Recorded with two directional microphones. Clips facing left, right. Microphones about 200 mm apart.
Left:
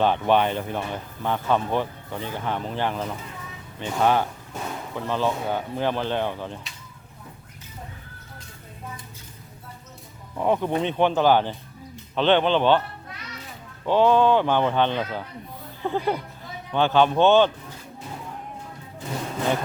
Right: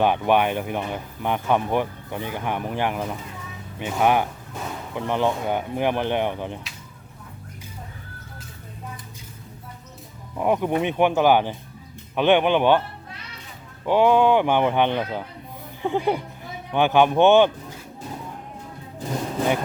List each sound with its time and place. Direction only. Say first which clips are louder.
0.0 s speech: right 1 dB; 15° right (ahead or behind)
10.3 s speech: right 1 dB; 10° right (ahead or behind)
13.8 s speech: right 1 dB; 15° right (ahead or behind)